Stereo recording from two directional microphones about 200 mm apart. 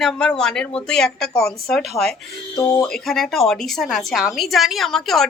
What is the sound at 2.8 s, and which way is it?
A woman's voice, centre (ahead or behind).